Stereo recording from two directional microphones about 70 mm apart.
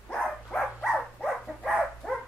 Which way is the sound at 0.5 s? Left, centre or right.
Centre.